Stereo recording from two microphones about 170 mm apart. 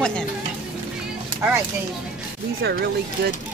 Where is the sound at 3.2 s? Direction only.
65° right (ahead or behind).